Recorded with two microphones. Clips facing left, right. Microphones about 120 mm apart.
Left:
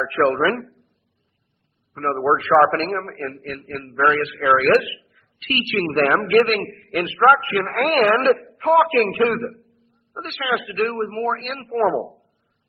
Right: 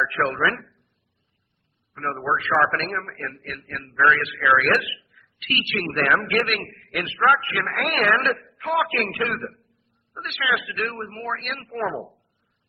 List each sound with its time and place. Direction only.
0.0 s a man's voice: 35° left (ahead or behind)
1.9 s a man's voice: 40° left (ahead or behind)
12.0 s a sound: 25° left (ahead or behind)